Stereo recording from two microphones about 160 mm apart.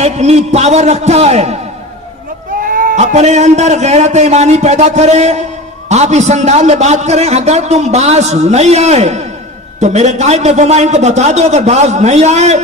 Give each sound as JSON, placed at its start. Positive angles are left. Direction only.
{"t": 0.0, "sound": "a man's voice", "side_deg": -40}
{"t": 2.6, "sound": "bleat", "side_deg": -60}
{"t": 3.0, "sound": "a man's voice", "side_deg": -45}